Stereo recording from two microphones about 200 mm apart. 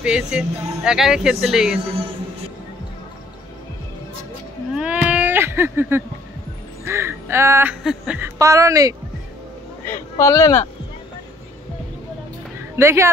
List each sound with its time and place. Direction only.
0.0 s speech: 5° right (ahead or behind)
4.7 s a sound: 5° right (ahead or behind)
6.9 s music: 10° right (ahead or behind)
7.8 s speech: centre (ahead or behind)
8.4 s speech: 15° right (ahead or behind)
9.8 s speech: 15° left (ahead or behind)
12.7 s speech: 15° right (ahead or behind)